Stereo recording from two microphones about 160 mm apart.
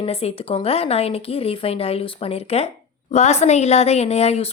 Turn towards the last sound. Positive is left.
turn(degrees=40)  # may be behind; listen again after turning